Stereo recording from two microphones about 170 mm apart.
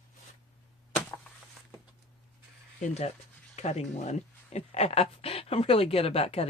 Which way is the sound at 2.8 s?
40° left (ahead or behind).